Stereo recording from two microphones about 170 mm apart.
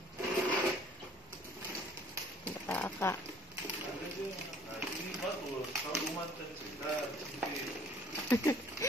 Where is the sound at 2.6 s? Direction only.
10° left (ahead or behind).